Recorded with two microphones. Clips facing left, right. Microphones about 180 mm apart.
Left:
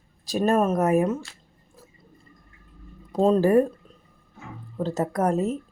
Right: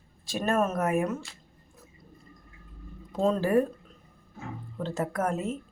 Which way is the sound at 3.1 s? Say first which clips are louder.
Left 6 dB; 35° left (ahead or behind).